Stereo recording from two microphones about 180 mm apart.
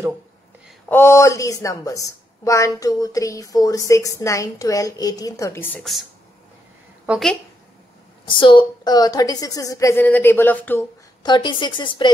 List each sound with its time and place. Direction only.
0.8 s a woman's voice: 15° left (ahead or behind)
7.1 s a woman's voice: centre (ahead or behind)
8.3 s a woman's voice: 25° left (ahead or behind); by 10.9 s 10° left (ahead or behind)
11.2 s a woman's voice: 25° left (ahead or behind)